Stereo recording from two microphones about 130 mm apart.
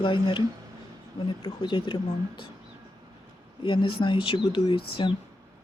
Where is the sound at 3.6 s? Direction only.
40° left (ahead or behind).